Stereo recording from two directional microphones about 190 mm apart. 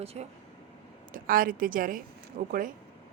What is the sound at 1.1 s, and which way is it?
A woman's voice, 50° right (ahead or behind).